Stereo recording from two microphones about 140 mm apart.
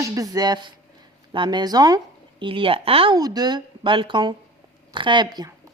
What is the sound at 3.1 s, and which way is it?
A woman's voice, 30° right (ahead or behind).